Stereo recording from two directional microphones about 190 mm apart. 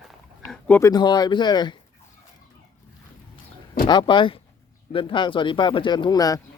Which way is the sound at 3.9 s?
25° left (ahead or behind).